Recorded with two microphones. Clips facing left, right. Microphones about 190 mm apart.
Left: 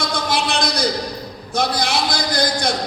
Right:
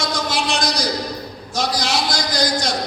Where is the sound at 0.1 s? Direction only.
60° left (ahead or behind).